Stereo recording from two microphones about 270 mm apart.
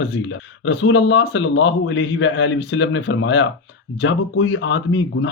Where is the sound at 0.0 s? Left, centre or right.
Left.